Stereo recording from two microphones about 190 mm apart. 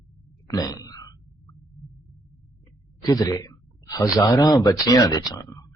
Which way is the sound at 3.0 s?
20° left (ahead or behind).